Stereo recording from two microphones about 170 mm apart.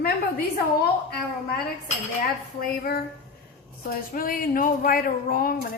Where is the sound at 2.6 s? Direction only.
65° left (ahead or behind).